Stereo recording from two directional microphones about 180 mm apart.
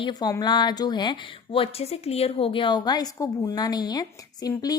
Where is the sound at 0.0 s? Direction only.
25° left (ahead or behind).